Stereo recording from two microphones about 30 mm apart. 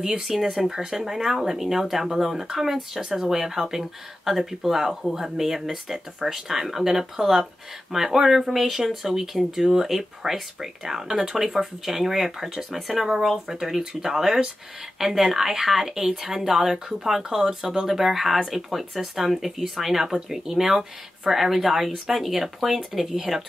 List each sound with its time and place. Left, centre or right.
0.3 s speech: centre
20.1 s speech: centre